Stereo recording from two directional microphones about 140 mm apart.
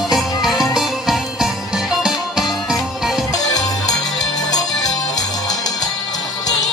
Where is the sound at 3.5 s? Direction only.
25° left (ahead or behind).